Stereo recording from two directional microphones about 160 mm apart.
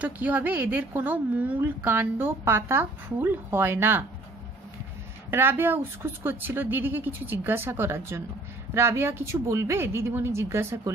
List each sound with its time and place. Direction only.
0.0 s a woman's voice: 10° right (ahead or behind)
5.3 s a woman's voice: 15° right (ahead or behind)